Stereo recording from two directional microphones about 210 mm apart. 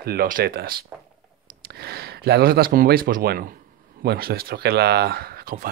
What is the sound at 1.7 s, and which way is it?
Speech, 50° right (ahead or behind).